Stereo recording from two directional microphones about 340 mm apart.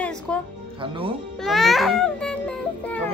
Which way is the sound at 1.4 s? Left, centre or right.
Centre.